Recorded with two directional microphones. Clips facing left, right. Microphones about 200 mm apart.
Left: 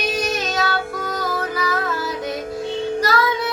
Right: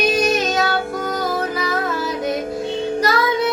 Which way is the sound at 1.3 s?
20° right (ahead or behind).